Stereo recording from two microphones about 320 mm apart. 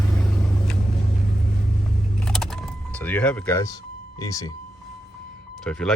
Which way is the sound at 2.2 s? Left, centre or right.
Centre.